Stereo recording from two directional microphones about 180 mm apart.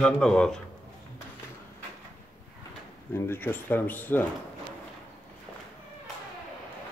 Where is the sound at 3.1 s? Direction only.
15° left (ahead or behind).